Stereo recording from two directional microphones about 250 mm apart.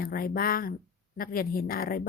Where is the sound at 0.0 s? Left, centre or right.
Left.